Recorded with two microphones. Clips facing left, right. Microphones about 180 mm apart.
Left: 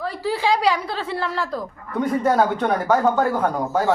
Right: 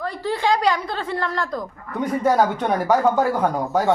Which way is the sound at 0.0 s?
5° left (ahead or behind).